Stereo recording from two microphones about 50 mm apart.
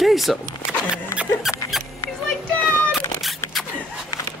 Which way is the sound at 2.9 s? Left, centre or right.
Centre.